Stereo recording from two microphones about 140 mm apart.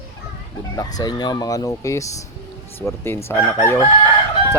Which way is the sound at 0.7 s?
25° left (ahead or behind).